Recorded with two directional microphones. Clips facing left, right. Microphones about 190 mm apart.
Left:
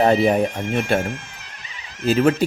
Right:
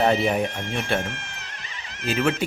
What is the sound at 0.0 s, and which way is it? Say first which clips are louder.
Speech: left 5 dB; 40° left (ahead or behind).